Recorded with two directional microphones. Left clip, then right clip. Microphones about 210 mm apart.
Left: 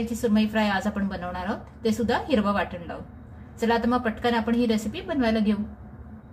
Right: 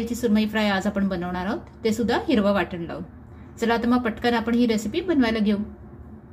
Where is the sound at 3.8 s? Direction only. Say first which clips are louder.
Right 2 dB; 40° right (ahead or behind).